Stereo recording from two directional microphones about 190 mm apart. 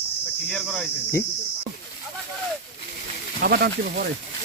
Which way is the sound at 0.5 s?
5° left (ahead or behind).